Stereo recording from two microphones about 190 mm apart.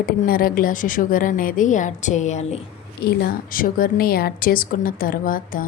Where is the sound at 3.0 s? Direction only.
55° left (ahead or behind).